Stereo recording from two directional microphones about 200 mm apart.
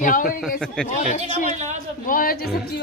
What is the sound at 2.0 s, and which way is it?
Speech, 45° left (ahead or behind).